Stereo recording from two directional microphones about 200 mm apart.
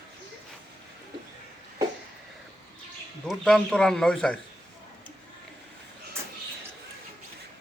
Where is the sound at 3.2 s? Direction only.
Centre (ahead or behind).